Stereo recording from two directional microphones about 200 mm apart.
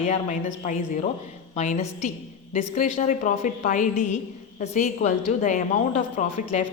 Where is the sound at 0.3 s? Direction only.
40° left (ahead or behind).